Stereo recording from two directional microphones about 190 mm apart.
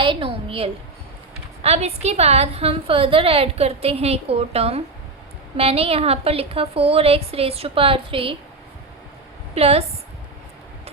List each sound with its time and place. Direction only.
0.0 s a woman's voice: 25° right (ahead or behind)
9.6 s a woman's voice: 30° right (ahead or behind)